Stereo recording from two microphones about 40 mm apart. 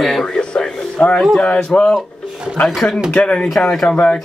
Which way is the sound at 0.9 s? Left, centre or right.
Left.